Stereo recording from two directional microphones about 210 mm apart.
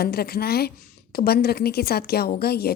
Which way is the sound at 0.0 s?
50° left (ahead or behind).